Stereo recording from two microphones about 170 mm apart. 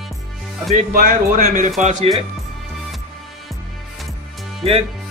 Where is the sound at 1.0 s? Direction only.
55° right (ahead or behind).